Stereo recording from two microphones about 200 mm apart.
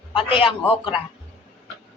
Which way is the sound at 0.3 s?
25° left (ahead or behind).